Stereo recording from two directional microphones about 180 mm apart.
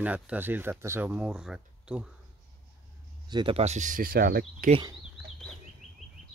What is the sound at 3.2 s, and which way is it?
Speech, 25° right (ahead or behind).